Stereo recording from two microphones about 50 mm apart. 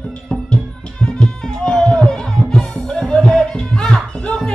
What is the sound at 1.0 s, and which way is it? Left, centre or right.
Music, centre.